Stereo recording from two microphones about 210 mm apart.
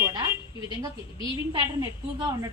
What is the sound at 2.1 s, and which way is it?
Speech, 20° right (ahead or behind).